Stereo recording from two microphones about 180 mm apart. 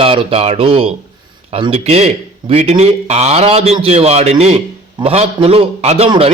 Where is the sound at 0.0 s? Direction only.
30° right (ahead or behind).